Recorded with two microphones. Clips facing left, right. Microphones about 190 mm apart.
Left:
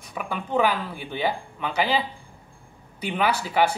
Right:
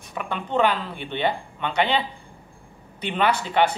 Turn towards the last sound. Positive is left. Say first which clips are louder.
# right 1 dB
turn(degrees=5)  # may be behind; listen again after turning